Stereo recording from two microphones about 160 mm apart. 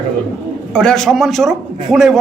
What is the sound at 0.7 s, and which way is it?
A man's voice, 5° left (ahead or behind).